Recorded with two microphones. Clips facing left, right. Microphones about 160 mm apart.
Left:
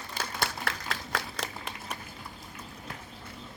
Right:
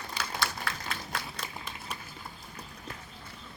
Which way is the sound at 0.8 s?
90° left.